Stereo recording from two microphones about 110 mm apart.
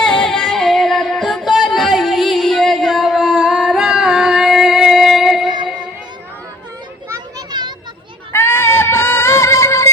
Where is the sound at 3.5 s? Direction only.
Centre (ahead or behind).